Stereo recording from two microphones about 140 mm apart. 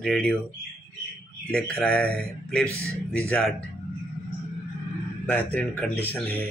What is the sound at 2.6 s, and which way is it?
Speech, 20° right (ahead or behind).